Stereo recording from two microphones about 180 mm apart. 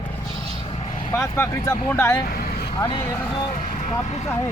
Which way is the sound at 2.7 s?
20° left (ahead or behind).